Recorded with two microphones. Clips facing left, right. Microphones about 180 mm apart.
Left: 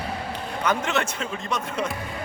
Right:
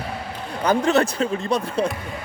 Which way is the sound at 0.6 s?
35° right (ahead or behind).